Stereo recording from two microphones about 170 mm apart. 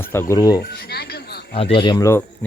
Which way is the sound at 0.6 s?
70° left (ahead or behind).